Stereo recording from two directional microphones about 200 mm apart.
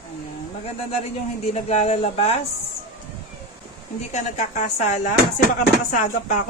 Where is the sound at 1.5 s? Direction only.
30° left (ahead or behind).